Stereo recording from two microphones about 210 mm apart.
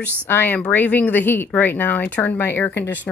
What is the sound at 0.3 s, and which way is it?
A woman's voice, 10° left (ahead or behind).